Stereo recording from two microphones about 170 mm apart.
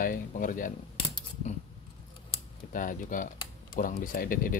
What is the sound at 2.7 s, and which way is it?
Speech, 50° left (ahead or behind).